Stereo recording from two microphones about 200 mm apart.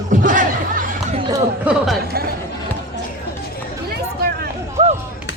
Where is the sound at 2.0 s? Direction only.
50° right (ahead or behind).